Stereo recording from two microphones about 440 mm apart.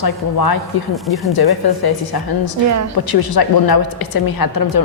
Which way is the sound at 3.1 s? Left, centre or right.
Left.